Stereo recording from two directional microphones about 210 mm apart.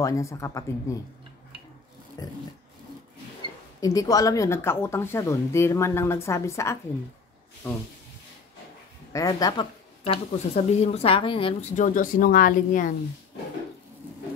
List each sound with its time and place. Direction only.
0.0 s speech: 15° left (ahead or behind)
2.2 s speech: 20° left (ahead or behind)
3.8 s speech: 15° left (ahead or behind)
9.1 s speech: 15° left (ahead or behind); by 12.9 s 40° left (ahead or behind)